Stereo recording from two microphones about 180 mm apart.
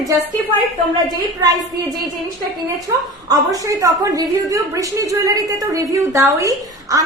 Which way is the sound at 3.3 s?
20° right (ahead or behind).